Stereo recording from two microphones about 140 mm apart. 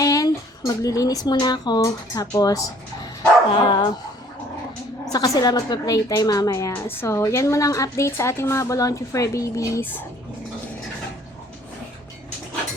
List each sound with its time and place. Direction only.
0.0 s speech: 25° left (ahead or behind)
5.1 s a woman's voice: 25° left (ahead or behind)